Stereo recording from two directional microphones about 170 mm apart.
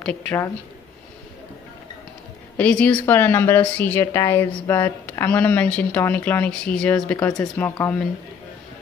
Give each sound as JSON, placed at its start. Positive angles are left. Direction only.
{"t": 0.0, "sound": "speech", "side_deg": 5}
{"t": 2.5, "sound": "speech", "side_deg": 10}